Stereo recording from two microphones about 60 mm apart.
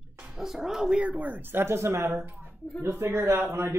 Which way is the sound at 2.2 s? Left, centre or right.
Right.